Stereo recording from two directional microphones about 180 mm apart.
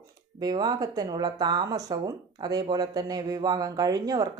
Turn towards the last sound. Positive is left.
turn(degrees=-20)  # may be behind; listen again after turning